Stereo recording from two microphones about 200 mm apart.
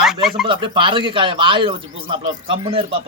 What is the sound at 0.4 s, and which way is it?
A man's voice, 25° right (ahead or behind).